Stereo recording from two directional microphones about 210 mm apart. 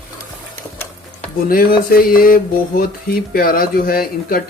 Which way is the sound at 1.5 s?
45° left (ahead or behind).